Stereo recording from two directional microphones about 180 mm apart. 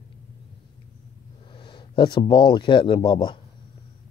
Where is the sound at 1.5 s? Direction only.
25° left (ahead or behind).